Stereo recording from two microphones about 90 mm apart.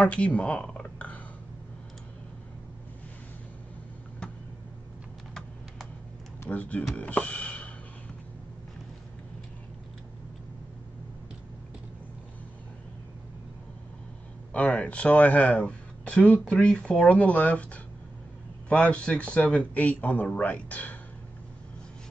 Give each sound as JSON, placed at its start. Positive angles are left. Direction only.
{"t": 0.0, "sound": "speech", "side_deg": 15}
{"t": 6.5, "sound": "speech", "side_deg": 15}
{"t": 7.0, "sound": "a sound", "side_deg": 15}
{"t": 14.5, "sound": "speech", "side_deg": 15}
{"t": 18.7, "sound": "speech", "side_deg": 10}